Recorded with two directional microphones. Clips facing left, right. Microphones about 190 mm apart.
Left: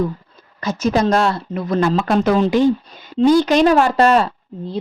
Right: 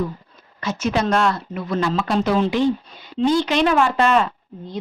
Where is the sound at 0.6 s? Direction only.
35° left (ahead or behind).